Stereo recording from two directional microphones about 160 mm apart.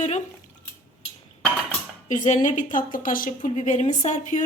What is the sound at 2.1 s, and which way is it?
A woman's voice, 50° left (ahead or behind).